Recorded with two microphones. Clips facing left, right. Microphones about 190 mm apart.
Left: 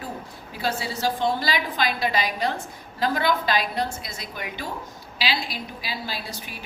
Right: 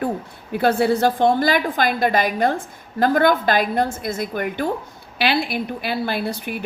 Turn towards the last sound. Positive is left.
turn(degrees=-55)  # may be behind; listen again after turning